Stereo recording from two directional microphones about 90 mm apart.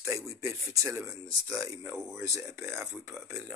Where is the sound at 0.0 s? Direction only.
35° right (ahead or behind).